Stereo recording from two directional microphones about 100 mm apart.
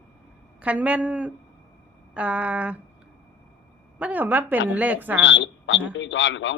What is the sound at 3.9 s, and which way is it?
A woman's voice, 15° right (ahead or behind).